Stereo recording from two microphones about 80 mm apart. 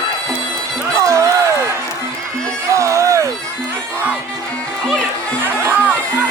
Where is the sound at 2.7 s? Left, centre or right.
Right.